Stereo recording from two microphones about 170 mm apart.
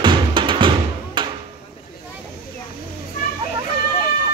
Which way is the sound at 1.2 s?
25° right (ahead or behind).